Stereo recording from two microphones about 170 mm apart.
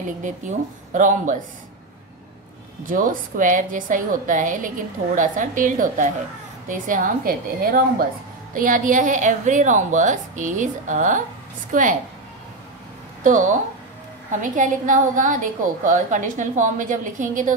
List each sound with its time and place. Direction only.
0.9 s a woman's voice: 50° right (ahead or behind)
2.8 s a woman's voice: 50° right (ahead or behind)
13.2 s a woman's voice: 50° right (ahead or behind)